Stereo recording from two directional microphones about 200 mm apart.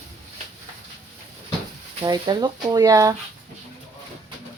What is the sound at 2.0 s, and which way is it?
Speech, 20° right (ahead or behind).